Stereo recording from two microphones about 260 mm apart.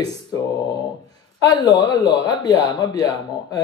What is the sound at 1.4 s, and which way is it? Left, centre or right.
Speech, centre.